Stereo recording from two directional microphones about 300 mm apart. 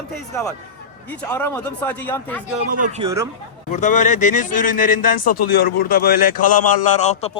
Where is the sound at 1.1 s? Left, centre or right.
Centre.